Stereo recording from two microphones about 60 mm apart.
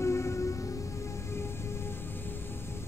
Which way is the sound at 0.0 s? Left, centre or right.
Left.